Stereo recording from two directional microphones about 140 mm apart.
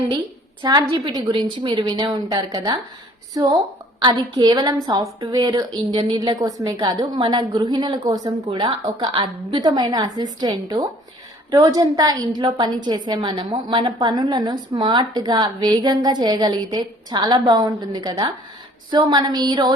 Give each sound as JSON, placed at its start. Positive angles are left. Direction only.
{"t": 0.6, "sound": "a woman's voice", "side_deg": -30}
{"t": 6.1, "sound": "a woman's voice", "side_deg": -25}